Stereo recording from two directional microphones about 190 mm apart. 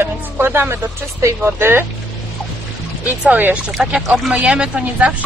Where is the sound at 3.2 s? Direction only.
10° right (ahead or behind).